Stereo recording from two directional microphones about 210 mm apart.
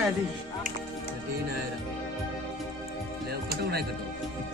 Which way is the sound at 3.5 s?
50° right (ahead or behind).